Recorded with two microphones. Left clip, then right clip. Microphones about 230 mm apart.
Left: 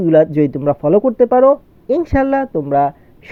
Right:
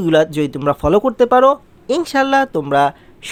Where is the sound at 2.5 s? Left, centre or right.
Centre.